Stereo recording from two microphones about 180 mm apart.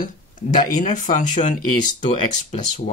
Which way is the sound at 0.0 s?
45° left (ahead or behind).